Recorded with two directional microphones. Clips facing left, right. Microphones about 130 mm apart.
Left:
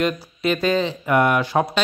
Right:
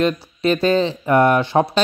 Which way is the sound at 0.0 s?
30° right (ahead or behind).